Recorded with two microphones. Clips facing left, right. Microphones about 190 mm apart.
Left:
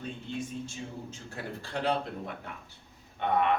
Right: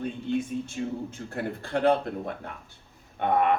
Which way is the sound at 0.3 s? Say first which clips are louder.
Right 7 dB; 55° right (ahead or behind).